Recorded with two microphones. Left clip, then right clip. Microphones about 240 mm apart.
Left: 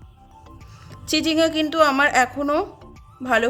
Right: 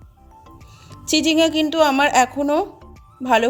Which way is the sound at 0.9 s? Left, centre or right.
Centre.